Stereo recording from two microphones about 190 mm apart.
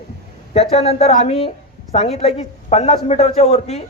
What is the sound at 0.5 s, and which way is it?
A man's voice, 35° left (ahead or behind).